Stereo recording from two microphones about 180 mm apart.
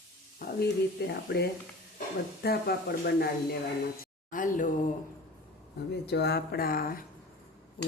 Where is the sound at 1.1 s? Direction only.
65° left (ahead or behind).